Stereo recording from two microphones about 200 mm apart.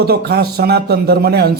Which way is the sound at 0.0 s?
50° right (ahead or behind).